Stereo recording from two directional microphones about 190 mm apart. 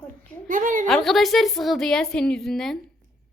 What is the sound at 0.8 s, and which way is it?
A woman's voice, centre (ahead or behind).